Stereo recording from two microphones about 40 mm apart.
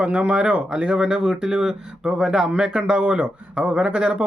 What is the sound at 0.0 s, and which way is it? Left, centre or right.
Speech, right.